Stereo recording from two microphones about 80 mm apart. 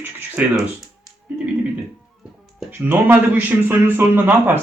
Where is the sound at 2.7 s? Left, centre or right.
Right.